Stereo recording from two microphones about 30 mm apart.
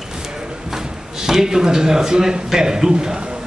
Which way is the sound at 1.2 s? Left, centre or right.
Centre.